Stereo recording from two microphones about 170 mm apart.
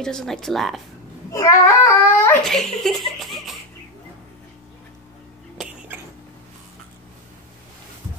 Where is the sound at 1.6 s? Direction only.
15° left (ahead or behind).